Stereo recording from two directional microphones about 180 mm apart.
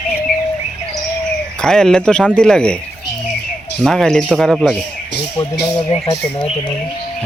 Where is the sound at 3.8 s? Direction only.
Centre (ahead or behind).